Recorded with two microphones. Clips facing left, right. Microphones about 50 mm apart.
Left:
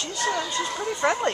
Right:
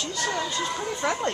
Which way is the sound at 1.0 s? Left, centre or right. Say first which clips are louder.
Left 4 dB; centre.